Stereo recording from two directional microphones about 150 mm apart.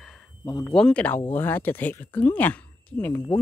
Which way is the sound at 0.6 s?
5° left (ahead or behind).